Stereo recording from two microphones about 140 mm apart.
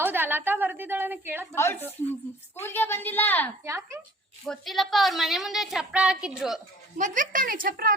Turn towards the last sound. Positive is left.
turn(degrees=-90)